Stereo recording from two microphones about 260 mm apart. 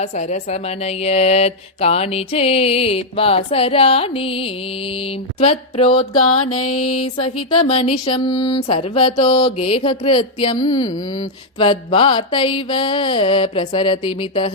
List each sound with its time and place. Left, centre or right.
0.0 s speech: left
6.1 s mantra: left
7.5 s speech: left